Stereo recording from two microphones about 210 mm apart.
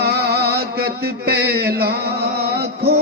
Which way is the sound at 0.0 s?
50° right (ahead or behind).